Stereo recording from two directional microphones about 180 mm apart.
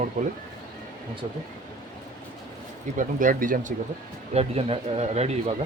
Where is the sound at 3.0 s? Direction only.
45° right (ahead or behind).